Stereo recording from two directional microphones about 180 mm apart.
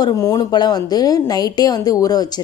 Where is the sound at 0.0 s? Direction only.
20° left (ahead or behind).